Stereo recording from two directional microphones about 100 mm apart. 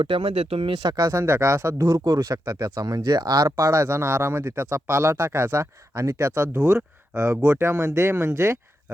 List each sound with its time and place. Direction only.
0.0 s speech: 65° right (ahead or behind); by 6.6 s 25° right (ahead or behind)
6.6 s speech: 15° right (ahead or behind)
7.6 s speech: 25° right (ahead or behind)